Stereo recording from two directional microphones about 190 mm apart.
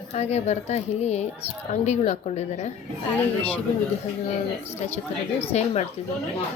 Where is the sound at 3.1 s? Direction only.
10° left (ahead or behind).